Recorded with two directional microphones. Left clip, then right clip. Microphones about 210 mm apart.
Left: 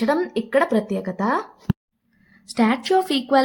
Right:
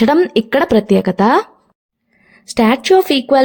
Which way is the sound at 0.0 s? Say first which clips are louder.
Right 9 dB; 45° right (ahead or behind).